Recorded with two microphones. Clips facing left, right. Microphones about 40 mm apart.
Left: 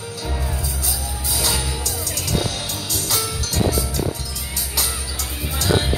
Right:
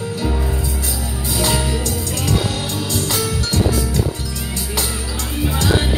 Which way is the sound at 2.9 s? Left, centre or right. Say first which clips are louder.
Right 4 dB; right.